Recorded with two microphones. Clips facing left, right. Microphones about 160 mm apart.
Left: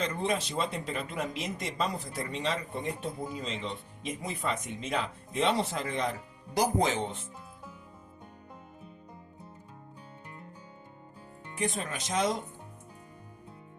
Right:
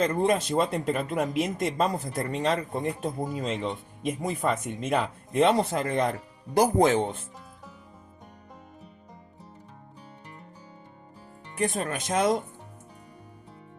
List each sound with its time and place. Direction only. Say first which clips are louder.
0.0 s speech: right 7 dB; 50° right (ahead or behind)
11.5 s speech: right 5 dB; 55° right (ahead or behind)